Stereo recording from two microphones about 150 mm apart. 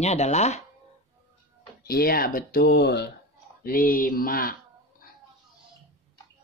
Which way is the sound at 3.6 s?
65° left (ahead or behind).